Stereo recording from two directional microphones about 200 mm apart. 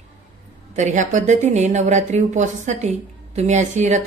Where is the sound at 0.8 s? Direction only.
35° right (ahead or behind).